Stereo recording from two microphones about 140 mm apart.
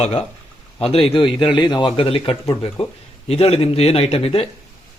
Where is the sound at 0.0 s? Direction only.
50° left (ahead or behind).